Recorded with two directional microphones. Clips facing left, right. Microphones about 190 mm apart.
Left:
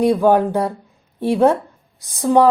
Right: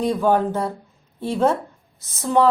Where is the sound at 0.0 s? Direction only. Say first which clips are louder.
Left 5 dB; 15° left (ahead or behind).